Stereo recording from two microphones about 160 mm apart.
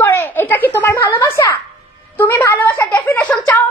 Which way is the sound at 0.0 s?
15° left (ahead or behind).